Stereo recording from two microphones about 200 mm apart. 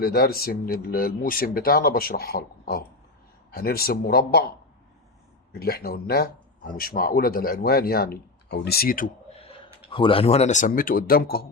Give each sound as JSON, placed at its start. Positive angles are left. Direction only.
{"t": 0.0, "sound": "speech", "side_deg": 50}
{"t": 5.5, "sound": "speech", "side_deg": 50}
{"t": 9.9, "sound": "speech", "side_deg": 25}